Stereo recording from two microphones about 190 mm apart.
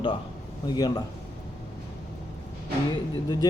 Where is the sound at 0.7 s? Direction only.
20° left (ahead or behind).